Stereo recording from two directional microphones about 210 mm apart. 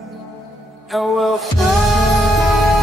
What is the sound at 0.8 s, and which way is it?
Music, centre (ahead or behind).